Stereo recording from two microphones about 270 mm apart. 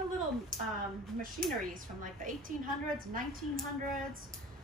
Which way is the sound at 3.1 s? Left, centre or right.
Right.